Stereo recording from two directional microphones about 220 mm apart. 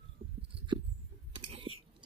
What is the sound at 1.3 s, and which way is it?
Chewing, 25° right (ahead or behind).